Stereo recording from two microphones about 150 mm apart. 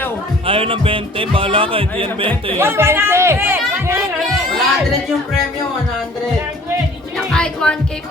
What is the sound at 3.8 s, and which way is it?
Music, 15° right (ahead or behind).